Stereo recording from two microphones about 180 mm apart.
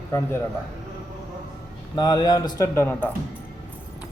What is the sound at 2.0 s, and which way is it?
A man's voice, 20° left (ahead or behind).